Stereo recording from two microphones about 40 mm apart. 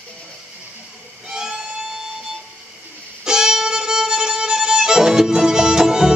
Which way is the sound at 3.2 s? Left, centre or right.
Centre.